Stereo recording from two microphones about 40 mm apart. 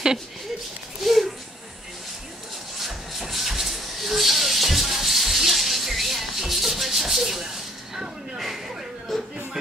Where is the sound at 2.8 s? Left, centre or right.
Centre.